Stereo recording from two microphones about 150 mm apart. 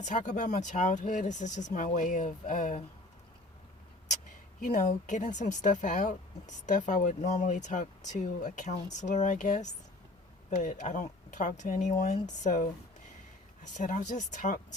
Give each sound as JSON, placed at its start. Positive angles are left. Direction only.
{"t": 0.0, "sound": "a woman's voice", "side_deg": 55}
{"t": 4.6, "sound": "a woman's voice", "side_deg": 55}